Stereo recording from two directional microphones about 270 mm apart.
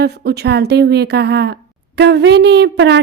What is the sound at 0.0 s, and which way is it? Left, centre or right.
Speech, right.